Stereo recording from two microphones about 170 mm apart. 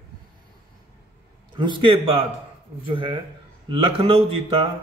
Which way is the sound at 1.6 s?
30° right (ahead or behind).